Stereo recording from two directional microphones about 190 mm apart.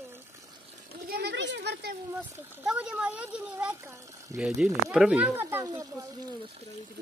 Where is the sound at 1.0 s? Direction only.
55° right (ahead or behind).